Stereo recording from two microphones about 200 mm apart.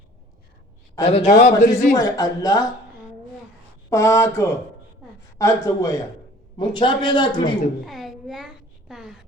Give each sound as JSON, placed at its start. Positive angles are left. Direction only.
{"t": 1.0, "sound": "a man's voice", "side_deg": 30}
{"t": 2.0, "sound": "speech", "side_deg": 15}
{"t": 3.8, "sound": "a man's voice", "side_deg": 15}
{"t": 7.9, "sound": "a sound", "side_deg": 0}
{"t": 8.9, "sound": "speech", "side_deg": 0}